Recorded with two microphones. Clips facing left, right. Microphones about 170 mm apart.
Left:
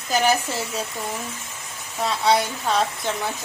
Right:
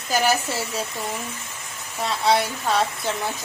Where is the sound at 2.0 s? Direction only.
Centre (ahead or behind).